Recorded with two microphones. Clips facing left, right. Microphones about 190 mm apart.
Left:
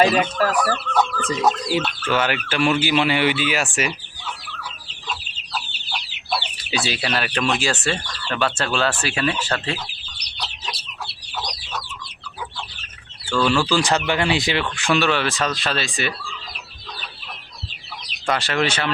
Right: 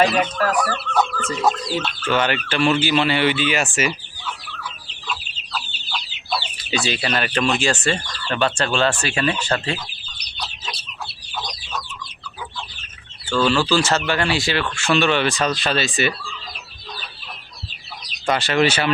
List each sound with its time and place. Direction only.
0.0 s speech: 5° left (ahead or behind)
1.2 s speech: 15° left (ahead or behind)
6.7 s speech: 5° left (ahead or behind)
13.4 s speech: 10° left (ahead or behind)
14.8 s speech: 5° left (ahead or behind)
18.3 s speech: centre (ahead or behind)